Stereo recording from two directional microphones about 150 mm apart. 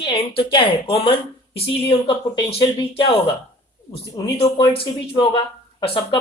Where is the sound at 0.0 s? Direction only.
35° left (ahead or behind).